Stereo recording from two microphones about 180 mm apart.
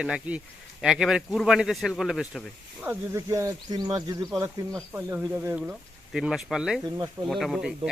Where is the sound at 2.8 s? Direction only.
15° right (ahead or behind).